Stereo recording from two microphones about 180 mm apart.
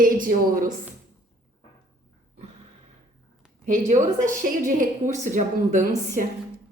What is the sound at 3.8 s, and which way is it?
A woman's voice, 45° right (ahead or behind).